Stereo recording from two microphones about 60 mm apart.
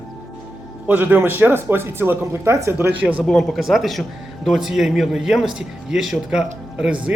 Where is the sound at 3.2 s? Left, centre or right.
Centre.